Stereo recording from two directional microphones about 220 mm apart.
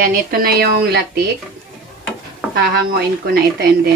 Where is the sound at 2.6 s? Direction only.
45° right (ahead or behind).